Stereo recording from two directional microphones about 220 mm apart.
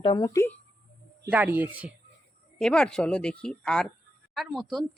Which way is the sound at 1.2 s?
10° right (ahead or behind).